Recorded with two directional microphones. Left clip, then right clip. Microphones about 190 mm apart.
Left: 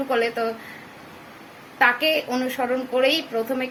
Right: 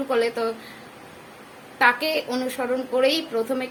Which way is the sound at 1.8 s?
Centre (ahead or behind).